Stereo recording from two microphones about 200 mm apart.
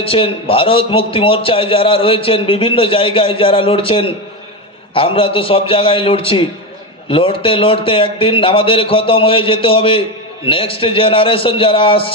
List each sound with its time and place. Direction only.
0.0 s a man's voice: 30° left (ahead or behind)